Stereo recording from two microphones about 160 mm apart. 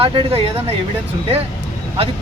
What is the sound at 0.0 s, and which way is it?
Speech, 35° right (ahead or behind).